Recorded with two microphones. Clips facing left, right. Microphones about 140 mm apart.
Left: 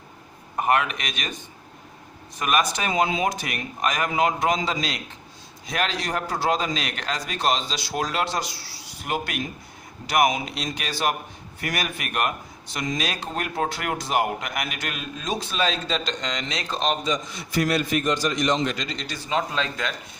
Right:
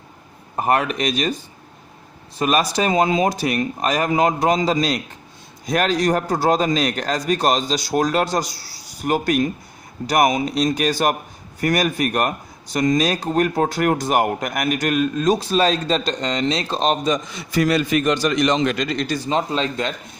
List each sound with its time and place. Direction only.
0.5 s a man's voice: 35° right (ahead or behind)
17.5 s a man's voice: 90° right; by 19.2 s 50° right (ahead or behind)
19.3 s speech: 25° right (ahead or behind)